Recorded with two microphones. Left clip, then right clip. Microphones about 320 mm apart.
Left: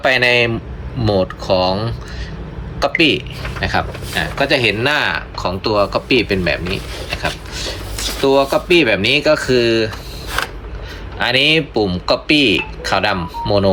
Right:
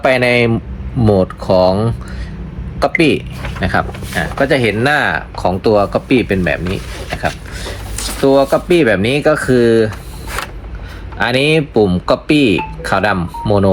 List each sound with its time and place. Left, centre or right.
0.0 s a man's voice: centre
7.2 s a sound: centre
8.2 s speech: centre
11.2 s speech: centre